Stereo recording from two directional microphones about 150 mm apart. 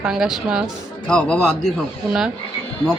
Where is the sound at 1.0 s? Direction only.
5° left (ahead or behind).